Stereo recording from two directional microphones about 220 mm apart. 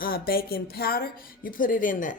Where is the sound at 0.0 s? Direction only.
45° left (ahead or behind).